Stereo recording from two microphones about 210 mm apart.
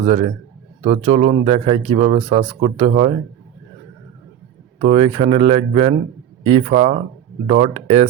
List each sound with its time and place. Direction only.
0.0 s speech: 30° right (ahead or behind)
4.9 s speech: 30° right (ahead or behind)